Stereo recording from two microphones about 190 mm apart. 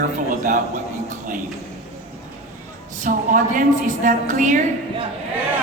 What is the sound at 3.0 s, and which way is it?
A man's voice, 45° right (ahead or behind).